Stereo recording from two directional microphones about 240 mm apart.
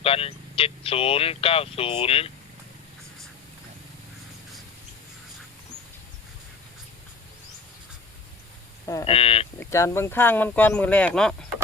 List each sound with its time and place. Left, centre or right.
0.0 s speech: left
9.0 s speech: left
9.6 s speech: centre